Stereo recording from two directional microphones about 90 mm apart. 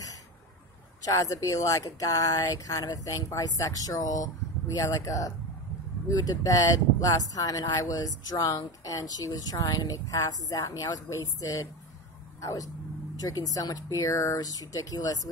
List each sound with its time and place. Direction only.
1.0 s speech: 40° left (ahead or behind)